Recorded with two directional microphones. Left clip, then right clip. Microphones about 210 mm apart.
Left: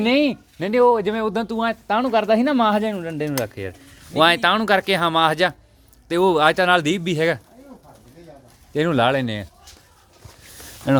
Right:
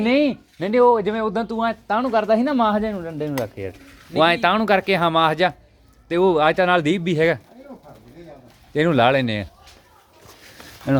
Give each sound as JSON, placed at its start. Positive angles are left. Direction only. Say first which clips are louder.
{"t": 0.0, "sound": "speech", "louder": "even", "side_deg": 15}
{"t": 8.7, "sound": "speech", "louder": "right 2 dB", "side_deg": 5}